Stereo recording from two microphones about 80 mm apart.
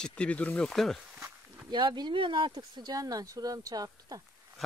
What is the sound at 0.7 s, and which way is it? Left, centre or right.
Speech, centre.